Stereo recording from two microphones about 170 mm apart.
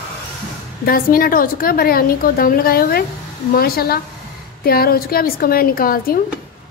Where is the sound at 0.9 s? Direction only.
60° left (ahead or behind).